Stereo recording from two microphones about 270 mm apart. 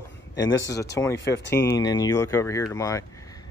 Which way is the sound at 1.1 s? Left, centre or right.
Left.